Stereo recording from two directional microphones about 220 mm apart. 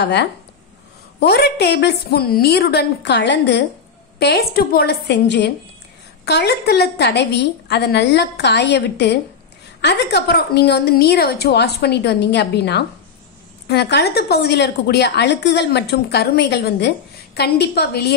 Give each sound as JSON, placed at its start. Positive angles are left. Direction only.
{"t": 0.0, "sound": "a woman's voice", "side_deg": 50}